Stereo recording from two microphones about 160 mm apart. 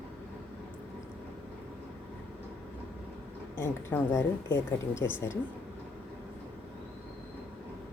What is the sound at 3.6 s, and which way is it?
Speech, 15° left (ahead or behind).